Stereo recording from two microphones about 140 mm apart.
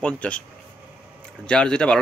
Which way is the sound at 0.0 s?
10° left (ahead or behind).